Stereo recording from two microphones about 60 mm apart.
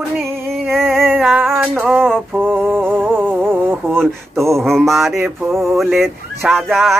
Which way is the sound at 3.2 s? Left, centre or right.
Right.